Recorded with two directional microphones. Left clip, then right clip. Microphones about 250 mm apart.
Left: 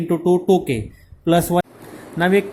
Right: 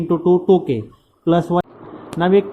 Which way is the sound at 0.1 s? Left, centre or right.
Centre.